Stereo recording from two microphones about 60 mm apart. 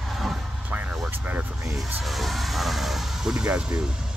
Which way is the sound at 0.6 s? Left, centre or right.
Right.